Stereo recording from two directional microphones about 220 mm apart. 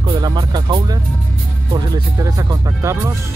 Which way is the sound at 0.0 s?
20° right (ahead or behind).